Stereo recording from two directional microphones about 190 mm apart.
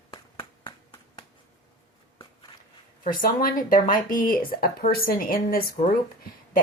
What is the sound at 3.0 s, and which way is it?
Speech, 50° left (ahead or behind).